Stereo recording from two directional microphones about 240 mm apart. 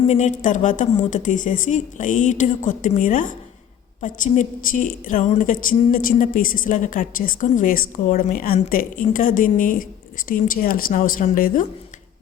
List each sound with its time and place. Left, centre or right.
0.0 s a woman's voice: left